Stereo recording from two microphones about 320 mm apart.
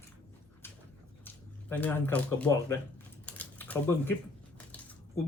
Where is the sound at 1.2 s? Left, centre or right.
Centre.